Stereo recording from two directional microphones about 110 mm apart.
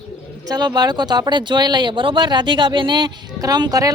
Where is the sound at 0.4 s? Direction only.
40° right (ahead or behind).